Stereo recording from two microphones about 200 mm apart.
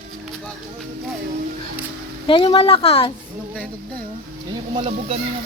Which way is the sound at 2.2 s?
25° left (ahead or behind).